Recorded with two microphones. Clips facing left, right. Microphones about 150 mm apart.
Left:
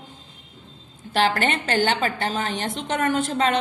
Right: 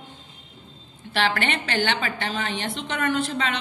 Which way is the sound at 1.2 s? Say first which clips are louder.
Left 3 dB; 40° left (ahead or behind).